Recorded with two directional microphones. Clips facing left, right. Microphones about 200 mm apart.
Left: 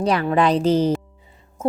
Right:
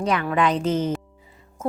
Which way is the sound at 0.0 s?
35° left (ahead or behind).